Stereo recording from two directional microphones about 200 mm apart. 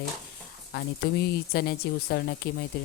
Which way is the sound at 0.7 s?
55° left (ahead or behind).